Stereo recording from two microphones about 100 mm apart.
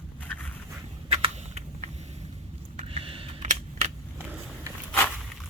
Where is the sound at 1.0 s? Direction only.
65° right (ahead or behind).